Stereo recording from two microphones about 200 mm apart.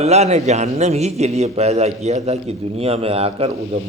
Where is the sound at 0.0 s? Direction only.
35° right (ahead or behind).